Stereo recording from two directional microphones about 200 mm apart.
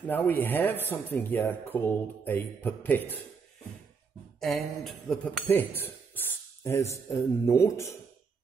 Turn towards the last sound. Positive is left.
turn(degrees=15)  # may be behind; listen again after turning